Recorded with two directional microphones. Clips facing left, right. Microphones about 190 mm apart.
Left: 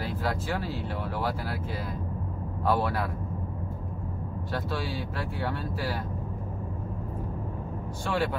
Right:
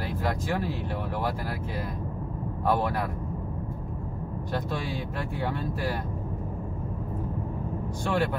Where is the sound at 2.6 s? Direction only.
15° right (ahead or behind).